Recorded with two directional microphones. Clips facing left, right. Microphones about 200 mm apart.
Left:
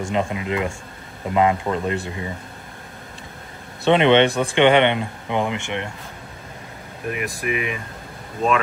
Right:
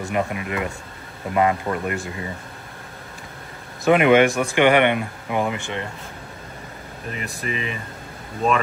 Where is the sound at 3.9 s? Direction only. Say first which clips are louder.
Even; 25° left (ahead or behind).